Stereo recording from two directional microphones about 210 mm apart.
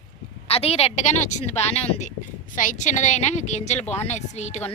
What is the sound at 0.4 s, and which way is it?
A woman's voice, 30° left (ahead or behind).